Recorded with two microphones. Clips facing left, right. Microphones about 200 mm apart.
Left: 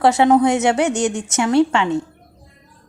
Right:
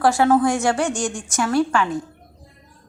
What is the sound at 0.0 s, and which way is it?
A woman's voice, 20° left (ahead or behind).